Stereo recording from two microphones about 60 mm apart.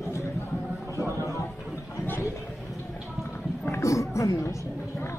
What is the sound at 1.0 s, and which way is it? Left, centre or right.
Music, right.